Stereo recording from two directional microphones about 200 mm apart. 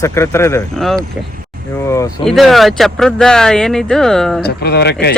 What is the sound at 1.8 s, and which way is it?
Speech, 15° left (ahead or behind).